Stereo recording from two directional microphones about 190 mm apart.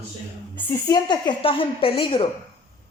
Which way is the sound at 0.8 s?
20° left (ahead or behind).